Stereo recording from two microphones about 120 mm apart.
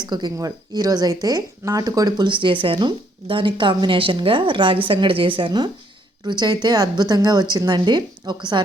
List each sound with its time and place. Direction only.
0.0 s a woman's voice: 35° right (ahead or behind)